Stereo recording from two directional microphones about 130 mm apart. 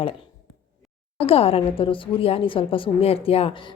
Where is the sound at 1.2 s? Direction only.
50° left (ahead or behind).